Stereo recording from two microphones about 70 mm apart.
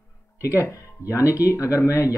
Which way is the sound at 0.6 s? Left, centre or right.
Left.